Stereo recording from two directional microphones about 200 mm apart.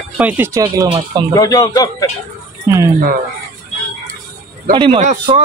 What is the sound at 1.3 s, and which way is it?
Speech, 15° left (ahead or behind).